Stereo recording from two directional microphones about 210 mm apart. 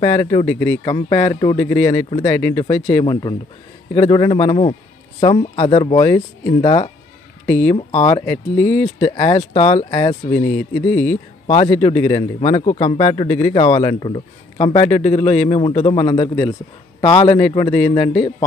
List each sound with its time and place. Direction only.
0.0 s a man's voice: 25° left (ahead or behind)
0.5 s a man's voice: 15° left (ahead or behind)
2.5 s a man's voice: 20° left (ahead or behind)
7.4 s speech: 10° left (ahead or behind)
7.7 s a man's voice: 25° left (ahead or behind)
8.3 s speech: 10° left (ahead or behind)
9.1 s a man's voice: 25° left (ahead or behind); by 11.1 s 5° left (ahead or behind)
11.6 s a man's voice: 25° left (ahead or behind)